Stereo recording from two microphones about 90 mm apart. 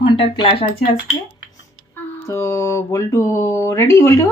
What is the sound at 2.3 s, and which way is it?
Speech, 30° left (ahead or behind).